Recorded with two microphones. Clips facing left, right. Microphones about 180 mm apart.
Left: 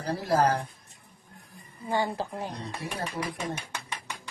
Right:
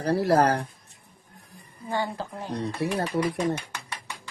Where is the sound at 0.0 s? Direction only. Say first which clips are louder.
Right 4 dB; 70° right (ahead or behind).